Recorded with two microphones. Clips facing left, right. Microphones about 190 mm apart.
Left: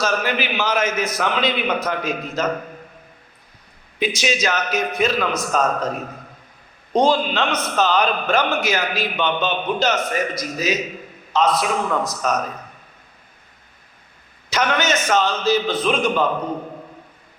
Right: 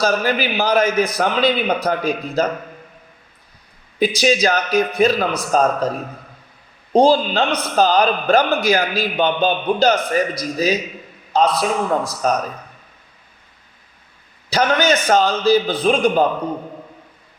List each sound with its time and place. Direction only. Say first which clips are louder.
0.0 s a man's voice: right 4 dB; 35° right (ahead or behind)
4.0 s a man's voice: right 5 dB; 35° right (ahead or behind)
6.9 s a man's voice: right 4 dB; 35° right (ahead or behind)
14.5 s a man's voice: right 4 dB; 35° right (ahead or behind)